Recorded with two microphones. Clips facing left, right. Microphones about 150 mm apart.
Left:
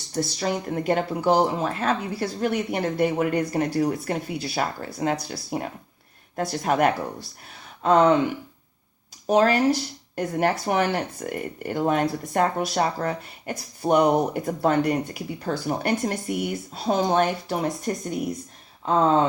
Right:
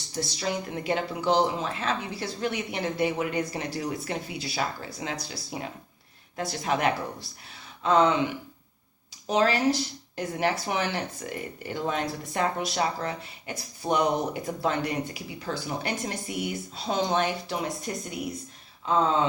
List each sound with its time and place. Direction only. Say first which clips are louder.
0.1 s speech: left 5 dB; 45° left (ahead or behind)
9.2 s speech: left 4 dB; 50° left (ahead or behind)